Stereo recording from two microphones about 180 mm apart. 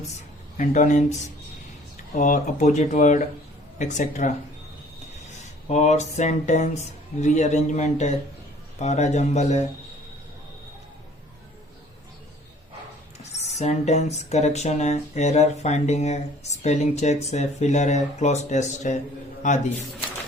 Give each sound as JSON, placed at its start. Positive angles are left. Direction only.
{"t": 0.5, "sound": "speech", "side_deg": 45}
{"t": 2.1, "sound": "speech", "side_deg": 40}
{"t": 5.4, "sound": "speech", "side_deg": 40}
{"t": 13.2, "sound": "speech", "side_deg": 40}